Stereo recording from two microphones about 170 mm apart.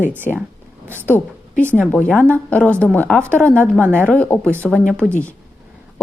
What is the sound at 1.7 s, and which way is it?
Speech, 10° right (ahead or behind).